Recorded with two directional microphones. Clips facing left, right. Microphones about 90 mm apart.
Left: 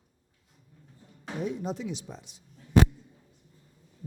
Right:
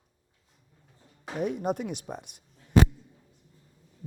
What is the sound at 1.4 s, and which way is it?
Speech, 55° right (ahead or behind).